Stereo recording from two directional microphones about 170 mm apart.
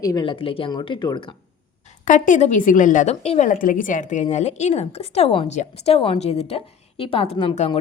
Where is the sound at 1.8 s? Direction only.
50° left (ahead or behind).